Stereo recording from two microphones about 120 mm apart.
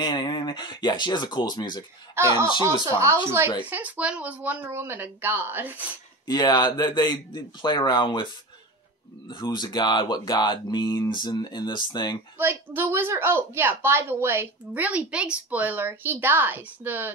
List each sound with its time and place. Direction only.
0.0 s speech: 40° left (ahead or behind)
2.6 s a woman's voice: 25° right (ahead or behind)
6.2 s speech: 35° left (ahead or behind)
9.3 s speech: 35° left (ahead or behind)
12.4 s a woman's voice: 20° right (ahead or behind)